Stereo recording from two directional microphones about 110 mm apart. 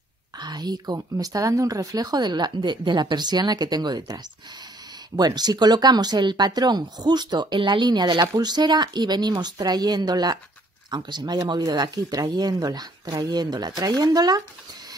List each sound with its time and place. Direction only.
0.4 s speech: 40° right (ahead or behind)